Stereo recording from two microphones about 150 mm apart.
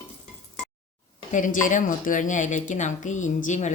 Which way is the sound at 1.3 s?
60° left (ahead or behind).